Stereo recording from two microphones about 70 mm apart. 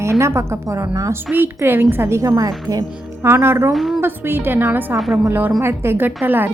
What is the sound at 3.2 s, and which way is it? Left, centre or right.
Speech, right.